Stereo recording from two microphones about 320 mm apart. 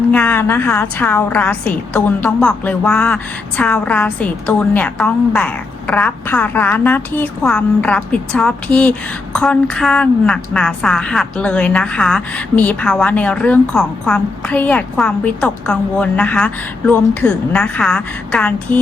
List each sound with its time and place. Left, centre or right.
0.1 s a woman's voice: centre